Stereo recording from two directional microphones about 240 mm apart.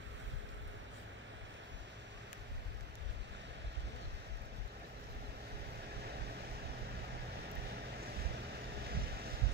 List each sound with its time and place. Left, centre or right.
8.0 s vehicle: right
8.8 s boat: right